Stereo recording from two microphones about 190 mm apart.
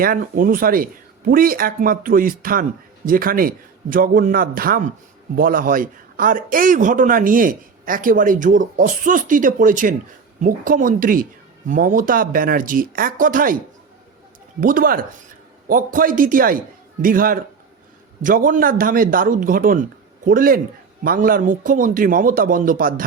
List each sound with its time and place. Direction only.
0.0 s a man's voice: 50° right (ahead or behind)
14.6 s a man's voice: 45° right (ahead or behind)